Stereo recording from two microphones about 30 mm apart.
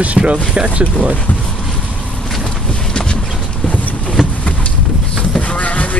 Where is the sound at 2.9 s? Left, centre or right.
Left.